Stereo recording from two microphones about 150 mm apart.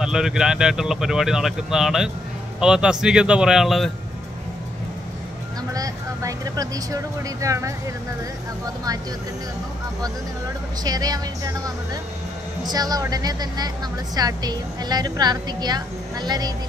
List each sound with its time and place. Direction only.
0.0 s speech: 5° right (ahead or behind)
5.8 s a woman's voice: 25° right (ahead or behind)
10.8 s a woman's voice: 25° right (ahead or behind)